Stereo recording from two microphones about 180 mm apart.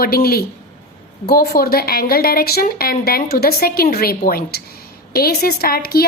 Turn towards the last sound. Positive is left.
turn(degrees=60)  # may be behind; listen again after turning